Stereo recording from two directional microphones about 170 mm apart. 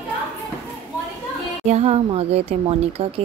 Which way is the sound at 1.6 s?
40° right (ahead or behind).